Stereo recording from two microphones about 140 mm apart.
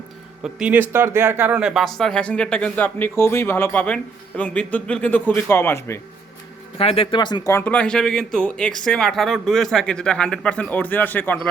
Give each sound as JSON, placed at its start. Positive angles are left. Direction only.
{"t": 0.4, "sound": "speech", "side_deg": -10}
{"t": 6.7, "sound": "speech", "side_deg": 40}
{"t": 7.5, "sound": "speech", "side_deg": 10}